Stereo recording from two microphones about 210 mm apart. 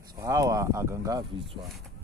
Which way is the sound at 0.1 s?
15° right (ahead or behind).